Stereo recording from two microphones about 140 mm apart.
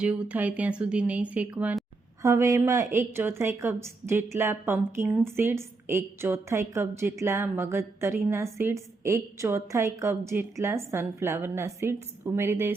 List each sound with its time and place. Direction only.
0.0 s a woman's voice: 10° right (ahead or behind)
2.2 s a woman's voice: 20° right (ahead or behind)